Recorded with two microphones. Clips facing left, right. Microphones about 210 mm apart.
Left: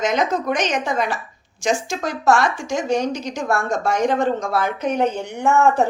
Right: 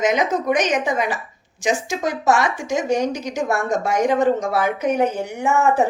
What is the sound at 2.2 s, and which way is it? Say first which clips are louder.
A woman's voice: left 3 dB; 20° right (ahead or behind).